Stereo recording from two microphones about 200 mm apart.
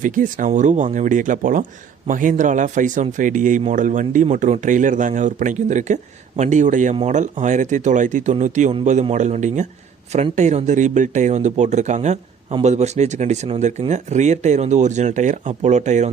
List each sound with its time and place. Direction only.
0.0 s speech: 40° right (ahead or behind)